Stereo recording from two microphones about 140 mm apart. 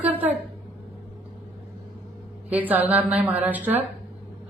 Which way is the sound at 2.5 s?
10° right (ahead or behind).